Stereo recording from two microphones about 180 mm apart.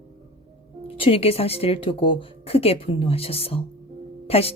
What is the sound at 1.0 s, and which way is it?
Speech, 30° left (ahead or behind).